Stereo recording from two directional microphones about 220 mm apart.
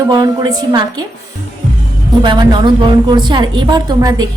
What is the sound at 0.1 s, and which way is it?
Speech, 20° right (ahead or behind).